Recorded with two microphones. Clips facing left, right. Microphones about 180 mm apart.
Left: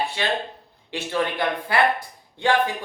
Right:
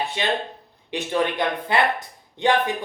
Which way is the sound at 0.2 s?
20° right (ahead or behind).